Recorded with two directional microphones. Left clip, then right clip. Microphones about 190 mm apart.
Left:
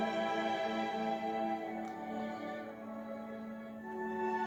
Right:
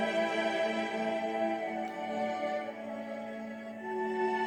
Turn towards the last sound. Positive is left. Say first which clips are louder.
# right 5 dB
turn(degrees=-35)  # may be behind; listen again after turning